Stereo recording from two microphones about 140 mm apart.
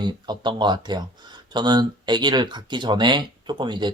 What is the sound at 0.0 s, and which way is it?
A man's voice, 30° right (ahead or behind).